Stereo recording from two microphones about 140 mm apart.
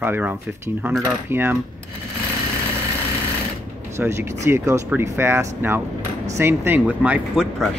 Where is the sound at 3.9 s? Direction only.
20° right (ahead or behind).